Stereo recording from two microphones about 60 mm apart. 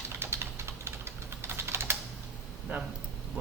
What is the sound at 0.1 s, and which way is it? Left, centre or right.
Typing, right.